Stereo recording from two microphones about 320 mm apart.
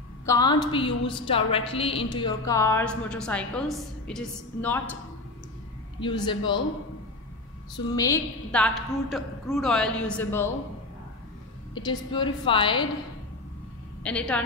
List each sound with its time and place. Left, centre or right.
0.2 s a woman's voice: centre
5.9 s a woman's voice: centre
7.9 s a woman's voice: centre
11.7 s a woman's voice: centre
14.0 s a woman's voice: centre